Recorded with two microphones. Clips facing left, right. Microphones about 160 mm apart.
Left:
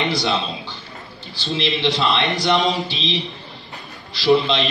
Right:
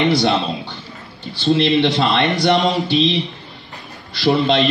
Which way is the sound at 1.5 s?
50° right (ahead or behind).